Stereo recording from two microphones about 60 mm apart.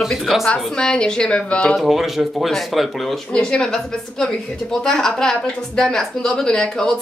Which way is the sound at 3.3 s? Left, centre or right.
Centre.